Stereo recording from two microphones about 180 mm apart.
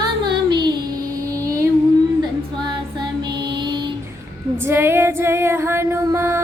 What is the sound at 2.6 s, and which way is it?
Child singing, 25° right (ahead or behind).